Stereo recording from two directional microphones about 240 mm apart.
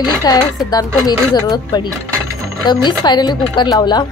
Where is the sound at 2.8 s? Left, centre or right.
Centre.